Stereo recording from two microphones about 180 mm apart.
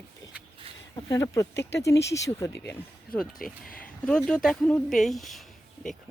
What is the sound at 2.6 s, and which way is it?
Speech, 5° left (ahead or behind).